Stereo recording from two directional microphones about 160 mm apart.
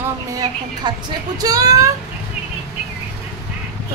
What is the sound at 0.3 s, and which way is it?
A woman's voice, 25° right (ahead or behind).